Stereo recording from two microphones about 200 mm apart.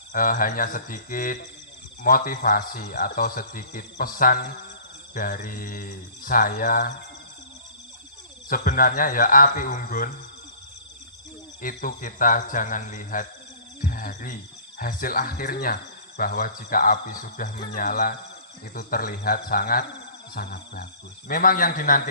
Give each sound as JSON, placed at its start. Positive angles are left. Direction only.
{"t": 0.1, "sound": "speech", "side_deg": 45}
{"t": 8.4, "sound": "speech", "side_deg": 40}
{"t": 11.6, "sound": "speech", "side_deg": 45}